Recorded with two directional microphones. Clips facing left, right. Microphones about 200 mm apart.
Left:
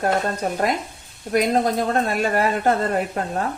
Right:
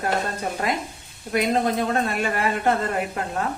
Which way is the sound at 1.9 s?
40° left (ahead or behind).